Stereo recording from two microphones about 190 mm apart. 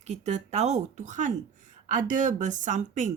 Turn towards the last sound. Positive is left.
turn(degrees=-40)  # may be behind; listen again after turning